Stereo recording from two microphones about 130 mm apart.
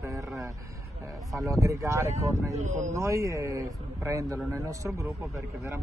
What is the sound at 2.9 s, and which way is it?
Speech, 25° right (ahead or behind).